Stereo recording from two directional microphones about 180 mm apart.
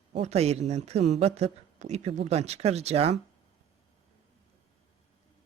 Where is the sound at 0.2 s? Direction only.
35° right (ahead or behind).